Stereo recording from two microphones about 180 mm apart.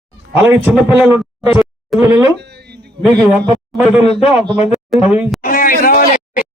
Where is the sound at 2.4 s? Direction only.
65° right (ahead or behind).